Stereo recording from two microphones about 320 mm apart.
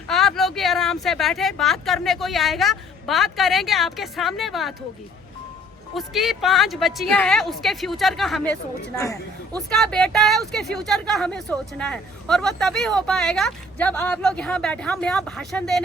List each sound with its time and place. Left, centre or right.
0.1 s a woman's voice: centre
5.9 s a woman's voice: centre
9.6 s a woman's voice: centre